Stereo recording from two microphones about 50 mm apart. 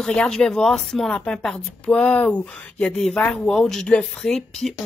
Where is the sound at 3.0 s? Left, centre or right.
Centre.